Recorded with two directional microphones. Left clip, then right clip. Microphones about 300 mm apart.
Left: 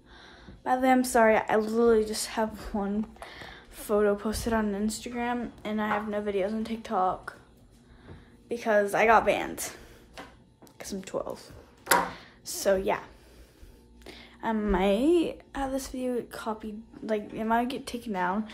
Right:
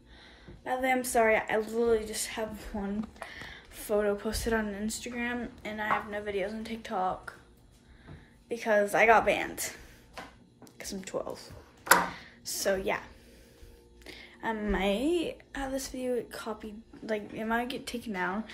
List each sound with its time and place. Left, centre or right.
0.2 s a woman's voice: centre
8.5 s a woman's voice: centre
10.6 s a sound: centre
14.0 s a woman's voice: centre